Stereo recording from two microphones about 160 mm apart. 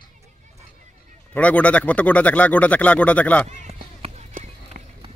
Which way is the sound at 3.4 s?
45° right (ahead or behind).